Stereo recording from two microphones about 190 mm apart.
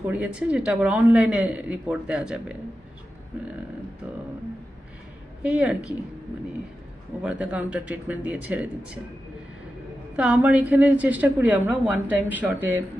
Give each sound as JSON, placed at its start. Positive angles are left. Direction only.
{"t": 0.1, "sound": "a woman's voice", "side_deg": -5}
{"t": 5.4, "sound": "a woman's voice", "side_deg": -5}
{"t": 7.2, "sound": "a woman's voice", "side_deg": -5}
{"t": 10.2, "sound": "a woman's voice", "side_deg": -5}